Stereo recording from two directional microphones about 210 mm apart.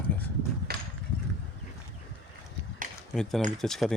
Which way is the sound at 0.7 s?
50° right (ahead or behind).